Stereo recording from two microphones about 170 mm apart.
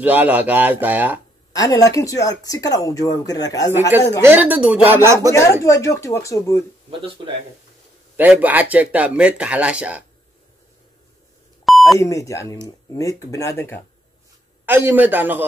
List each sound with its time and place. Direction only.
0.0 s speech: 10° right (ahead or behind)
1.5 s speech: 20° left (ahead or behind)
4.2 s speech: 10° right (ahead or behind)
5.3 s speech: 15° left (ahead or behind)
6.9 s speech: 30° right (ahead or behind)
8.2 s speech: 10° right (ahead or behind)
11.6 s beep: centre (ahead or behind)
12.0 s speech: 20° left (ahead or behind)
14.7 s speech: 10° right (ahead or behind)